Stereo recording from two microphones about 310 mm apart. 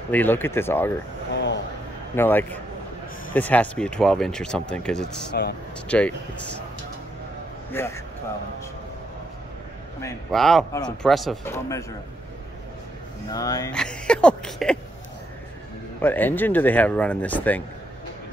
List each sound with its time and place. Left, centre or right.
0.1 s speech: centre
1.3 s a sound: left
2.1 s speech: centre
5.3 s speech: left
5.9 s speech: centre
7.7 s speech: centre
10.0 s speech: centre
13.3 s speech: centre
16.0 s speech: centre